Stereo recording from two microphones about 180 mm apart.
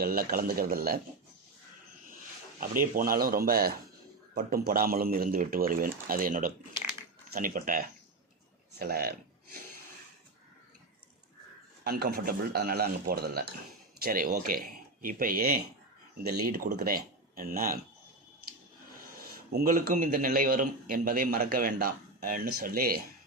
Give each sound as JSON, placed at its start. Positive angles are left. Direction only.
{"t": 0.0, "sound": "a man's voice", "side_deg": -55}
{"t": 2.6, "sound": "a man's voice", "side_deg": -50}
{"t": 11.8, "sound": "a man's voice", "side_deg": -60}
{"t": 19.3, "sound": "a man's voice", "side_deg": -60}